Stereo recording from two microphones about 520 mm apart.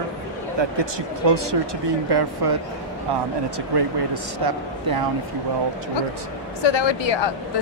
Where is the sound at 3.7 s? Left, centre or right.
Right.